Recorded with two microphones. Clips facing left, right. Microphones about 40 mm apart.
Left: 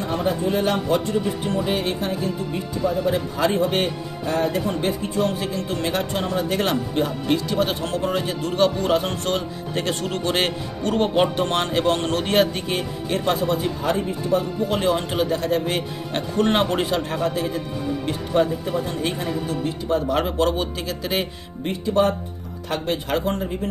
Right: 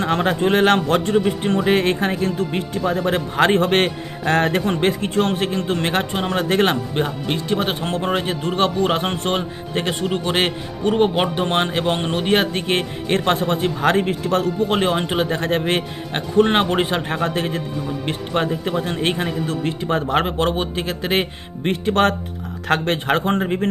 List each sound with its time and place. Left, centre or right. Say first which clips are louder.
0.0 s speech: right 4 dB; right
1.0 s speech: right 5 dB; right
1.6 s speech: right 7 dB; right
12.5 s speech: right 4 dB; right
13.8 s speech: right 5 dB; right
14.7 s speech: right 2 dB; right
16.2 s speech: right 4 dB; right
17.3 s speech: right 2 dB; right
21.6 s speech: right 2 dB; right
23.0 s speech: right 4 dB; right